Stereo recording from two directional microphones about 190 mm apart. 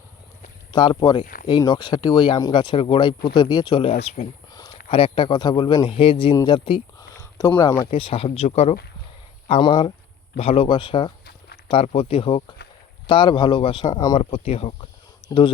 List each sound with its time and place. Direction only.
0.7 s speech: 25° left (ahead or behind)
1.2 s a sound: 45° left (ahead or behind)
1.5 s speech: 20° left (ahead or behind)
4.5 s a sound: 25° left (ahead or behind)
4.9 s speech: 25° left (ahead or behind)
7.9 s speech: 30° left (ahead or behind)
9.5 s speech: 25° left (ahead or behind)